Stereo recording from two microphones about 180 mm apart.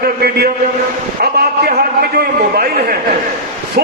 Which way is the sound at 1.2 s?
60° right (ahead or behind).